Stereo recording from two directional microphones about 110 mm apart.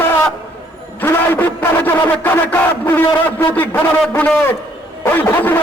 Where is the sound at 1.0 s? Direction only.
20° left (ahead or behind).